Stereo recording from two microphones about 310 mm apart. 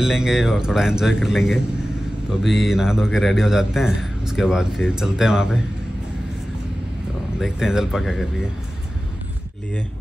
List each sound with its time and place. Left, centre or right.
0.0 s a man's voice: centre
7.3 s a man's voice: centre